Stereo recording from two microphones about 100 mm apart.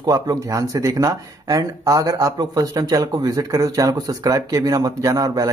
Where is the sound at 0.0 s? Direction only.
35° right (ahead or behind).